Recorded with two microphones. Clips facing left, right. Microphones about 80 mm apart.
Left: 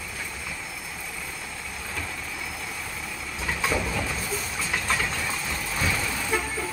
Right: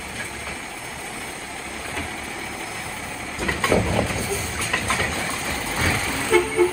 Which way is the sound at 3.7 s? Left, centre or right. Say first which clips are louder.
Right 9 dB; right.